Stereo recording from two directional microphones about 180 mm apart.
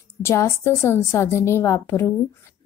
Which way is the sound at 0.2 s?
15° left (ahead or behind).